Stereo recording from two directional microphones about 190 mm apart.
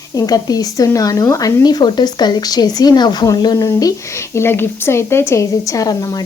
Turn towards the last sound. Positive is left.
turn(degrees=20)  # may be behind; listen again after turning